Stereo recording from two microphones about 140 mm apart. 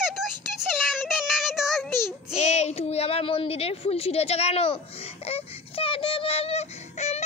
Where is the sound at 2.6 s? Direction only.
50° left (ahead or behind).